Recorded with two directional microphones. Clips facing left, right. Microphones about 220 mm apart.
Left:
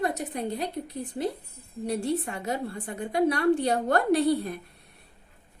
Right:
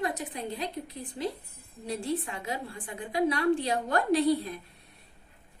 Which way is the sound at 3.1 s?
60° left (ahead or behind).